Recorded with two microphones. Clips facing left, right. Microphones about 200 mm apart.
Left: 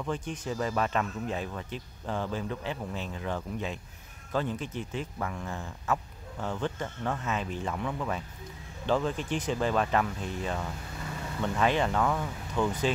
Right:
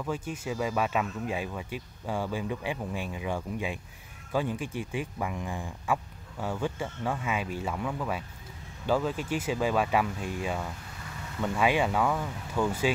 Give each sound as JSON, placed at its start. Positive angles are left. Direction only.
{"t": 0.0, "sound": "speech", "side_deg": -5}